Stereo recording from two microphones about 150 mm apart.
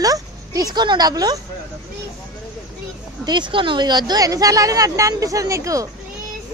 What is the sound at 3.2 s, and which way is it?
A woman's voice, 30° right (ahead or behind).